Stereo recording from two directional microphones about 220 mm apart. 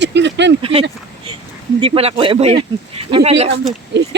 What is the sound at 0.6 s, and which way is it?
Speech, 25° right (ahead or behind).